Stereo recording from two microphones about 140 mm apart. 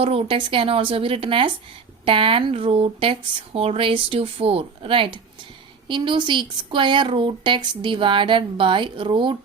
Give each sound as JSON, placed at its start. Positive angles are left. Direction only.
{"t": 0.0, "sound": "speech", "side_deg": -45}